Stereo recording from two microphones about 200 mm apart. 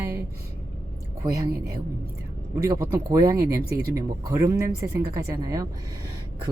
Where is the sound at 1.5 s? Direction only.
50° right (ahead or behind).